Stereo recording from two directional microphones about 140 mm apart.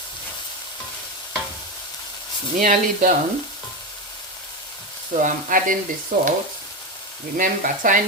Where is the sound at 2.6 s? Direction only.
70° right (ahead or behind).